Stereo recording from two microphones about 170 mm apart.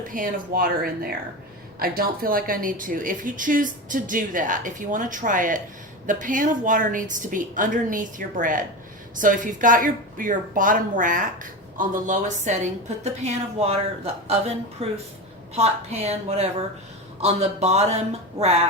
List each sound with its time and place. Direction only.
0.0 s a woman's voice: 50° right (ahead or behind)